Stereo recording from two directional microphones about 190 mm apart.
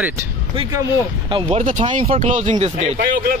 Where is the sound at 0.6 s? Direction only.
20° right (ahead or behind).